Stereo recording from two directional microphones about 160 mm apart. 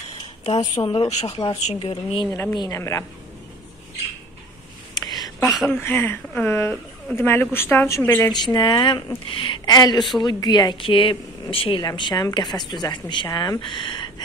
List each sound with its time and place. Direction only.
0.4 s speech: 45° left (ahead or behind)
1.9 s speech: 30° left (ahead or behind)
4.9 s a sound: 25° left (ahead or behind)
5.7 s speech: 15° left (ahead or behind)
8.5 s speech: 30° left (ahead or behind)